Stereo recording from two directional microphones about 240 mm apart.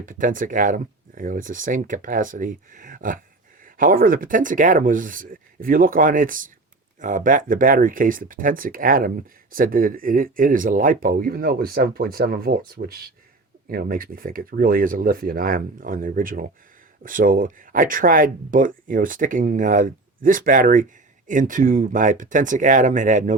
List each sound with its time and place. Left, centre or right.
0.0 s speech: right